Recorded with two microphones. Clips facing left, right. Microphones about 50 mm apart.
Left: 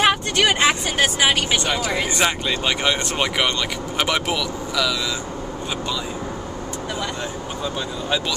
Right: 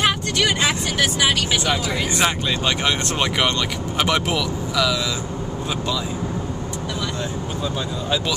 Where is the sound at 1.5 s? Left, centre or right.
Centre.